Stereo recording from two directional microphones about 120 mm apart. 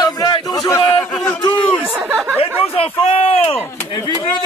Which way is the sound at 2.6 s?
50° left (ahead or behind).